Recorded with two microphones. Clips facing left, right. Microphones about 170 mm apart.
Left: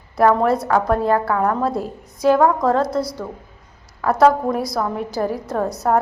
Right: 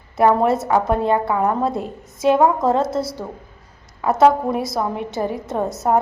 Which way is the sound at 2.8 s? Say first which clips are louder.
Left 1 dB; 25° right (ahead or behind).